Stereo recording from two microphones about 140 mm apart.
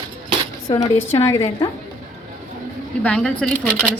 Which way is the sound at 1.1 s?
20° left (ahead or behind).